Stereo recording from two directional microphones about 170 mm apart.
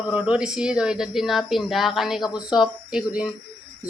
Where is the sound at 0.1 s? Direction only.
5° right (ahead or behind).